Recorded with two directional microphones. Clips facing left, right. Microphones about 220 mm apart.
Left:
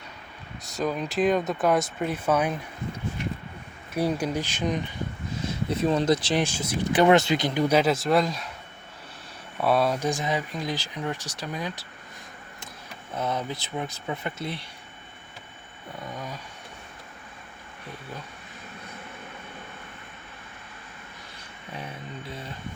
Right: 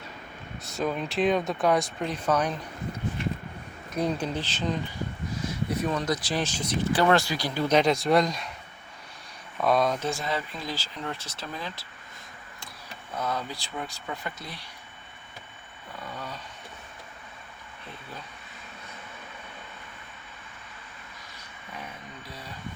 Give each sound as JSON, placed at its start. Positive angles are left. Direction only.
{"t": 0.6, "sound": "speech", "side_deg": 0}
{"t": 3.9, "sound": "speech", "side_deg": 10}
{"t": 5.5, "sound": "speech", "side_deg": 25}
{"t": 6.4, "sound": "speech", "side_deg": 10}
{"t": 6.9, "sound": "speech", "side_deg": 20}
{"t": 7.8, "sound": "speech", "side_deg": 5}
{"t": 9.6, "sound": "speech", "side_deg": 5}
{"t": 13.1, "sound": "speech", "side_deg": 20}
{"t": 16.1, "sound": "speech", "side_deg": 15}